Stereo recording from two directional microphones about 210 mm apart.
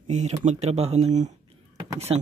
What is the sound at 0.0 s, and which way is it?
Speech, 30° right (ahead or behind).